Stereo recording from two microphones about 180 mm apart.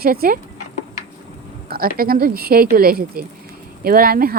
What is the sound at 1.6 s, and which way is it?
Speech, 55° right (ahead or behind).